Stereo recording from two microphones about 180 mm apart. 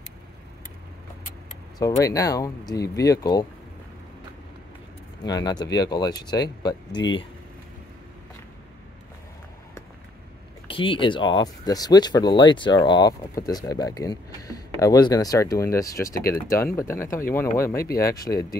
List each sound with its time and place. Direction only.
1.8 s speech: 20° left (ahead or behind)
5.2 s speech: 20° left (ahead or behind)
10.7 s speech: 30° left (ahead or behind)